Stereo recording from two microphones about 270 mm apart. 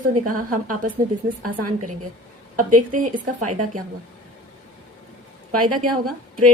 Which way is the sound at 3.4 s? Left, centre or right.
Right.